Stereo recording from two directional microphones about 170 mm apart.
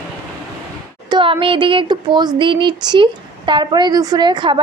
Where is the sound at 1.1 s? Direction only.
30° right (ahead or behind).